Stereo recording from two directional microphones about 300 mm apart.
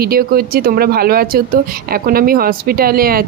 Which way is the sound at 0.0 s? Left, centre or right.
Right.